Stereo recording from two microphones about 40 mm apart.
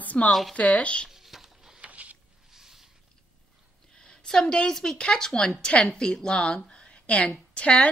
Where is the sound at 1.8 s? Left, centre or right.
Right.